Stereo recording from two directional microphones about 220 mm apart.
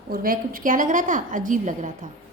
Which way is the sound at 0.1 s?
40° right (ahead or behind).